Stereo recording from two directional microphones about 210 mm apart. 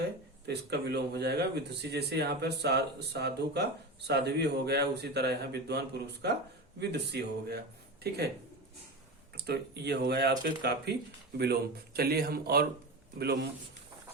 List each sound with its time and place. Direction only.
0.4 s speech: 50° right (ahead or behind)
9.3 s speech: 50° right (ahead or behind)